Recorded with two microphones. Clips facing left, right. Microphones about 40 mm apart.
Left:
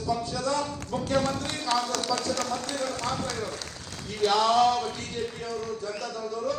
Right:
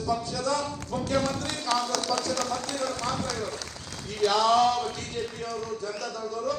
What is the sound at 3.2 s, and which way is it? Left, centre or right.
A man's voice, left.